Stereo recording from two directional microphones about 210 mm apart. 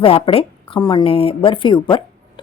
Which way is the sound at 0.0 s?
25° left (ahead or behind).